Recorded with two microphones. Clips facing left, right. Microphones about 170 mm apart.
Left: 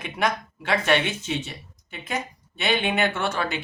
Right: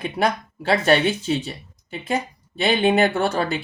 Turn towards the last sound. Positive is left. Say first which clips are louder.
# right 5 dB
turn(degrees=-35)  # may be behind; listen again after turning